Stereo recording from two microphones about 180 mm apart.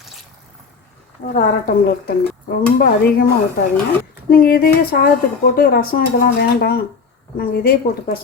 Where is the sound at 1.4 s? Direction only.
55° left (ahead or behind).